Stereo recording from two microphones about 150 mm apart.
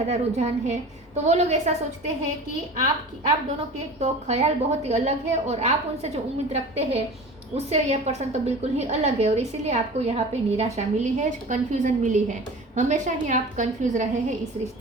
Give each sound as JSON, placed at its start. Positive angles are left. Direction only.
{"t": 0.1, "sound": "a woman's voice", "side_deg": -50}
{"t": 4.0, "sound": "a woman's voice", "side_deg": -45}